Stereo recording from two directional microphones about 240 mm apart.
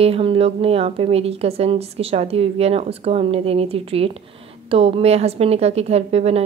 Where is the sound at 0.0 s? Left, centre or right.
Right.